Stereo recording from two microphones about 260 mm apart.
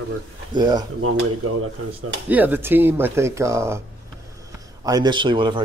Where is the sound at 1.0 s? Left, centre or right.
Right.